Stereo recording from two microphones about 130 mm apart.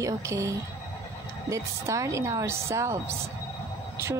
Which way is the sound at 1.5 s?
25° right (ahead or behind).